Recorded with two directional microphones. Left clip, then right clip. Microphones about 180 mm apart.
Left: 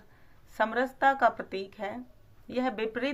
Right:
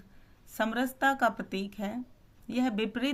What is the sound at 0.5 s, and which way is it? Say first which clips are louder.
Speech: left 3 dB; 30° right (ahead or behind).